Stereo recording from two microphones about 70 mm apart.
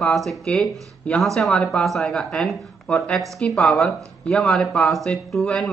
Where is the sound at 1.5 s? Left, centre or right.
Centre.